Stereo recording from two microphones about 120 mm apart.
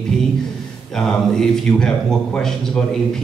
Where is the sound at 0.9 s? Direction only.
5° left (ahead or behind).